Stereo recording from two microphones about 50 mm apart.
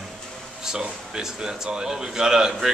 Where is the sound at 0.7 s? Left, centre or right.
Centre.